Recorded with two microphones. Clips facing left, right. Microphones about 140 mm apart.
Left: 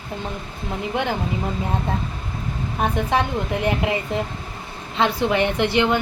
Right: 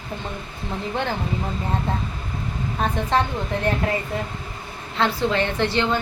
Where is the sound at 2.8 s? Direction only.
15° left (ahead or behind).